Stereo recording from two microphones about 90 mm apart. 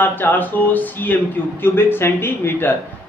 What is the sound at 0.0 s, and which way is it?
Speech, 20° left (ahead or behind).